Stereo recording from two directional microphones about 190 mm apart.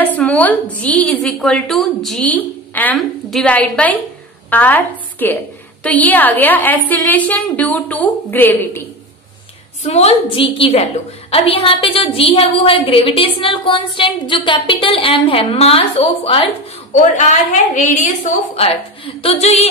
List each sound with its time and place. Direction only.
0.0 s a woman's voice: 10° left (ahead or behind)
9.8 s a woman's voice: 35° left (ahead or behind)
16.9 s a woman's voice: 40° left (ahead or behind)
18.6 s a woman's voice: 30° left (ahead or behind)